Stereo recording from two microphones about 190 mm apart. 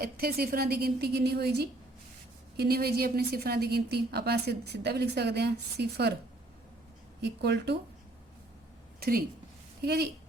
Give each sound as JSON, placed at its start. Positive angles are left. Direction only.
{"t": 0.0, "sound": "a woman's voice", "side_deg": -55}
{"t": 7.2, "sound": "a woman's voice", "side_deg": -65}
{"t": 9.0, "sound": "a woman's voice", "side_deg": -55}